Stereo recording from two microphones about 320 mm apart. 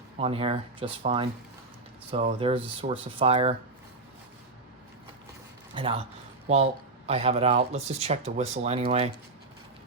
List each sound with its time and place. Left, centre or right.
0.2 s speech: centre
5.7 s speech: centre
7.1 s speech: centre